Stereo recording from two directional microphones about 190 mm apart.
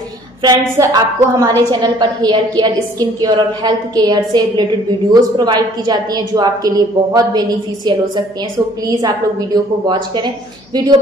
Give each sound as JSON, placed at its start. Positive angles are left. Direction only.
{"t": 0.4, "sound": "a woman's voice", "side_deg": -20}